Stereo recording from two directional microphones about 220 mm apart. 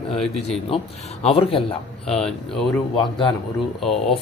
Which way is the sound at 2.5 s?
Centre (ahead or behind).